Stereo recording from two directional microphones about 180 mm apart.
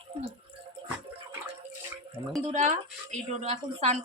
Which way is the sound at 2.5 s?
40° right (ahead or behind).